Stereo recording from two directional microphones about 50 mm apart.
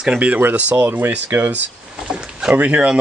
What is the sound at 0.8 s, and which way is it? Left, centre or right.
Speech, right.